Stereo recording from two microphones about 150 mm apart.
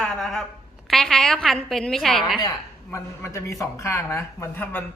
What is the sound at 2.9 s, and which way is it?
A man's voice, 20° left (ahead or behind).